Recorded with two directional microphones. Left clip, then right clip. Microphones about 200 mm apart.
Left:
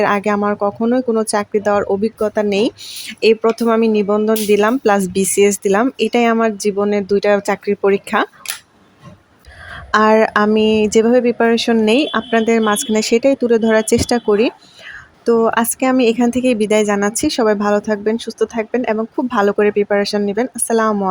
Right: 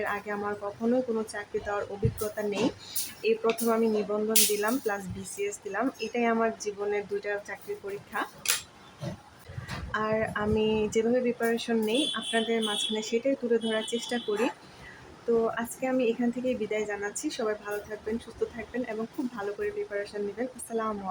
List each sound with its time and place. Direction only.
0.0 s speech: 50° left (ahead or behind)
9.9 s speech: 50° left (ahead or behind)